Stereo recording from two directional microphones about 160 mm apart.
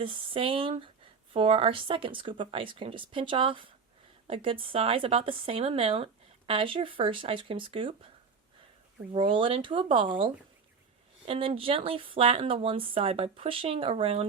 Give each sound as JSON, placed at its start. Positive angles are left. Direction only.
{"t": 0.0, "sound": "speech", "side_deg": -35}
{"t": 9.1, "sound": "speech", "side_deg": -30}